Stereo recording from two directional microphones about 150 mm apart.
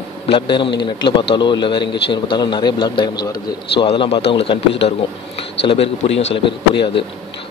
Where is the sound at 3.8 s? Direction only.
35° left (ahead or behind).